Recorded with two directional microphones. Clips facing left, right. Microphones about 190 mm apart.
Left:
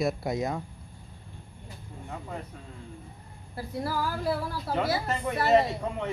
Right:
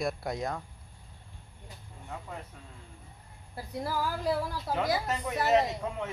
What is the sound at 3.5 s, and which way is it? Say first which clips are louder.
Speech: left 2 dB; 20° right (ahead or behind).